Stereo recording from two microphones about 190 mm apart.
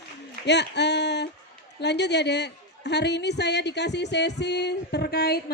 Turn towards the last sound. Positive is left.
turn(degrees=55)  # may be behind; listen again after turning